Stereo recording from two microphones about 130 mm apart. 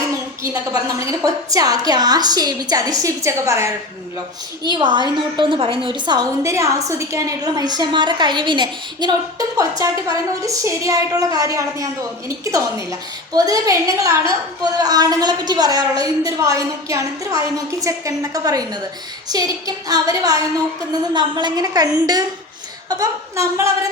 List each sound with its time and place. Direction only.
0.4 s a woman's voice: 25° right (ahead or behind)
4.6 s a woman's voice: 35° right (ahead or behind)